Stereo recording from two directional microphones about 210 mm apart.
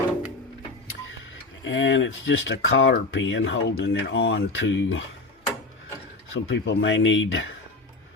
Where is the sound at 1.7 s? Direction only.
60° left (ahead or behind).